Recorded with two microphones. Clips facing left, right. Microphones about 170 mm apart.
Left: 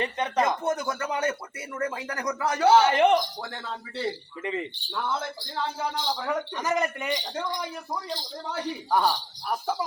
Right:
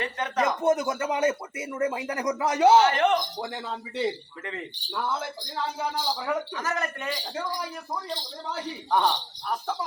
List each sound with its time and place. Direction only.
0.0 s speech: 20° left (ahead or behind)
0.6 s speech: 20° right (ahead or behind)
2.8 s speech: 15° left (ahead or behind)
3.2 s speech: 20° right (ahead or behind)
6.6 s speech: 15° left (ahead or behind)
7.1 s a man's voice: 5° right (ahead or behind)
8.9 s speech: 5° left (ahead or behind)